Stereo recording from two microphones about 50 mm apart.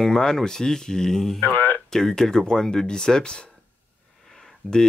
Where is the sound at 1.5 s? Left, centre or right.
Left.